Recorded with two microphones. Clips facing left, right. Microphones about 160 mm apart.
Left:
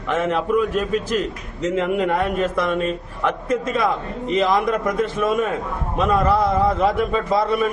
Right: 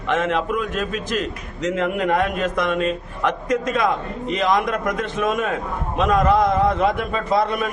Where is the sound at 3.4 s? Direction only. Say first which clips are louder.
Even; 30° left (ahead or behind).